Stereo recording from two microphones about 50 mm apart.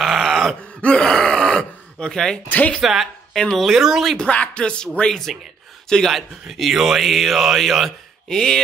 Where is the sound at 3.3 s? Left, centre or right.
Centre.